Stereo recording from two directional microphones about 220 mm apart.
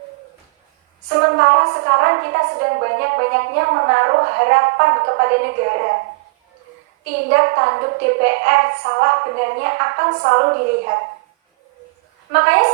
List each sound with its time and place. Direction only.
1.2 s a woman's voice: 50° right (ahead or behind)
7.3 s a woman's voice: 50° right (ahead or behind)
12.3 s a woman's voice: 50° right (ahead or behind)